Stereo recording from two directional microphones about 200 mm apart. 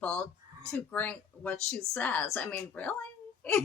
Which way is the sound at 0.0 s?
5° left (ahead or behind).